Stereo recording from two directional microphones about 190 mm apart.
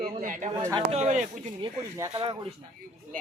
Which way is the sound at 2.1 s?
25° right (ahead or behind).